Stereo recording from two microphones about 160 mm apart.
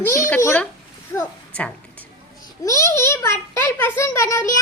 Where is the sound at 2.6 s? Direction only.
20° left (ahead or behind).